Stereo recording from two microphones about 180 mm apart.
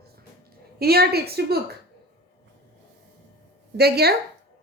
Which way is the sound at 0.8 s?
60° right (ahead or behind).